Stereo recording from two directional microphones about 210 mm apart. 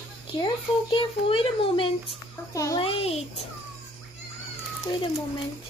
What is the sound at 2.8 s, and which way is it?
Speech, 30° left (ahead or behind).